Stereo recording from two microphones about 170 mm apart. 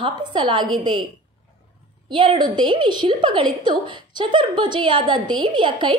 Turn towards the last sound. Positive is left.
turn(degrees=-30)  # may be behind; listen again after turning